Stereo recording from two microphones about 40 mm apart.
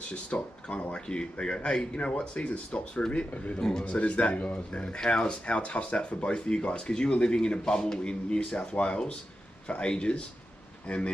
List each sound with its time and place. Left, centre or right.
0.1 s speech: left
4.8 s speech: left